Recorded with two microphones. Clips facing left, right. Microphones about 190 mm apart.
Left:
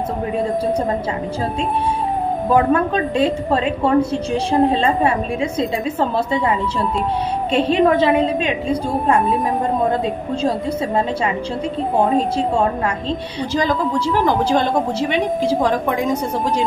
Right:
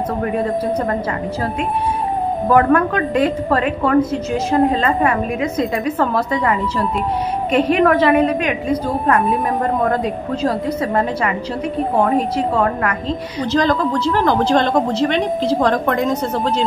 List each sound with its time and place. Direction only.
2.5 s a woman's voice: 25° left (ahead or behind)
13.5 s a woman's voice: 10° left (ahead or behind)